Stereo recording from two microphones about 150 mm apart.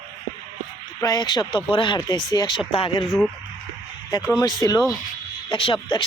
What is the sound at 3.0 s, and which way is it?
Speech, centre (ahead or behind).